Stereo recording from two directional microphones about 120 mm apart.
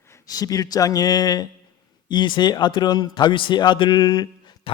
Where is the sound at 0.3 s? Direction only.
30° left (ahead or behind).